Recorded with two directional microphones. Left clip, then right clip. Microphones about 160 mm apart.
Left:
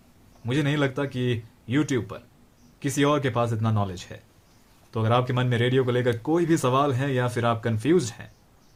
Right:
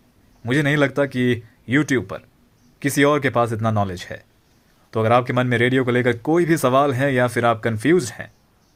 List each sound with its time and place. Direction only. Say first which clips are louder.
0.4 s speech: right 7 dB; 60° right (ahead or behind)